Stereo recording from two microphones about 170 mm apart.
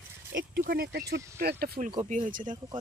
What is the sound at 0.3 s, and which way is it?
Speech, 60° right (ahead or behind).